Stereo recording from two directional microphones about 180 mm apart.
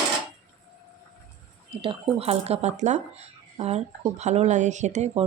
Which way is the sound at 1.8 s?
30° right (ahead or behind).